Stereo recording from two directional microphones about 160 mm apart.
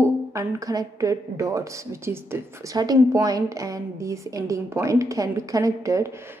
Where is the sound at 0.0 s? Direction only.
20° right (ahead or behind).